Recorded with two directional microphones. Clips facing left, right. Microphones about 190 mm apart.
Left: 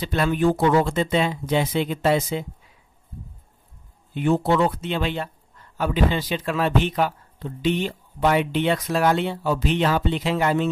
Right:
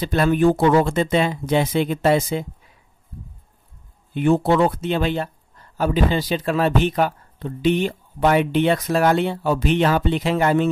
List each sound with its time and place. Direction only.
0.0 s speech: 40° right (ahead or behind)
4.2 s speech: 50° right (ahead or behind)